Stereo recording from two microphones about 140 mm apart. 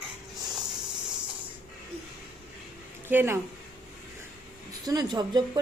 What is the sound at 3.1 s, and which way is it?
Speech, 15° right (ahead or behind).